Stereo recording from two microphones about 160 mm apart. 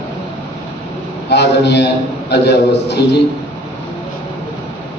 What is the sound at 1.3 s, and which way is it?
A man's voice, 90° left.